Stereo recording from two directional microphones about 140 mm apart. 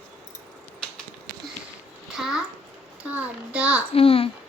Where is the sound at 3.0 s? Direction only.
10° right (ahead or behind).